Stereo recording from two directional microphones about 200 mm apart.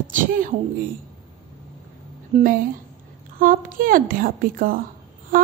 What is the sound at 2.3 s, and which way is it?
A woman's voice, 40° right (ahead or behind).